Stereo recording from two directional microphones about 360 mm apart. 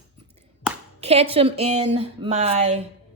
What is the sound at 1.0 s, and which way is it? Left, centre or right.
Speech, centre.